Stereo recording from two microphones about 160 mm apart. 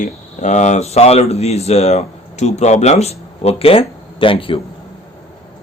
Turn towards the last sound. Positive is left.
turn(degrees=35)  # may be behind; listen again after turning